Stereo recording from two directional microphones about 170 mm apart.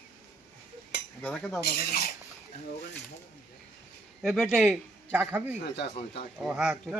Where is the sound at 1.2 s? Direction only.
5° left (ahead or behind).